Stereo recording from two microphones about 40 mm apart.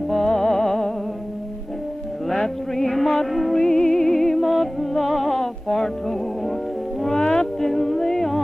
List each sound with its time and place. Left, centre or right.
0.1 s music: centre
2.2 s music: centre
5.3 s music: centre
7.2 s music: left
7.6 s a capella: centre